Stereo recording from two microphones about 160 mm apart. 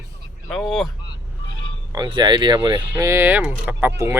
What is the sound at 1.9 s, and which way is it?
Speech, 25° right (ahead or behind).